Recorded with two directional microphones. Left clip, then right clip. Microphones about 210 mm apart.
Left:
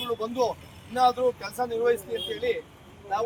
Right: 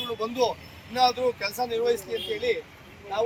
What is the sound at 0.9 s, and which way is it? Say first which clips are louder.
Speech: left 1 dB; 10° right (ahead or behind).